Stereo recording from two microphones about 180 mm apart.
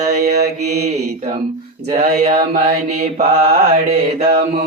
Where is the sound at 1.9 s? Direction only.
40° right (ahead or behind).